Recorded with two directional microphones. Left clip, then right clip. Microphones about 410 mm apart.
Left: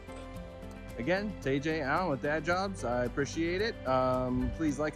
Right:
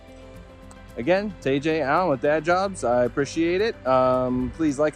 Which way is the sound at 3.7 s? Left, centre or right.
Right.